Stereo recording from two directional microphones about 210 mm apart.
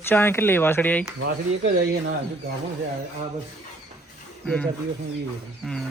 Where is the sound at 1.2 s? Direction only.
60° right (ahead or behind).